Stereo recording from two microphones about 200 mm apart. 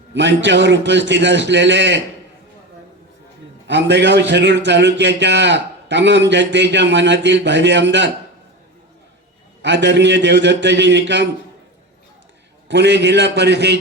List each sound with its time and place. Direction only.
0.1 s a man's voice: 65° right (ahead or behind)
3.7 s a man's voice: 60° right (ahead or behind)
9.6 s a man's voice: 60° right (ahead or behind)
12.6 s a man's voice: 60° right (ahead or behind)